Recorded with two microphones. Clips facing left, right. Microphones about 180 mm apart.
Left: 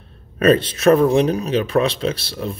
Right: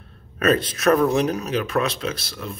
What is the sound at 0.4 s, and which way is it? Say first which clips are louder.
Speech: left 5 dB; 30° left (ahead or behind).